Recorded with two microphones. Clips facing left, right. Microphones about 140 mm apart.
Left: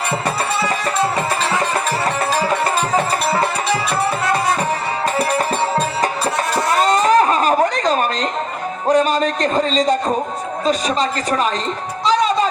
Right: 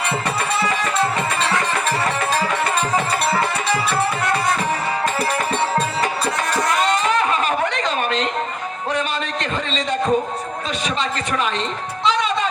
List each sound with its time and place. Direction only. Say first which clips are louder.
6.5 s a sound: left 3 dB; 35° left (ahead or behind)
10.7 s speech: left 7 dB; 40° left (ahead or behind)
12.0 s music: left 4 dB; 35° left (ahead or behind)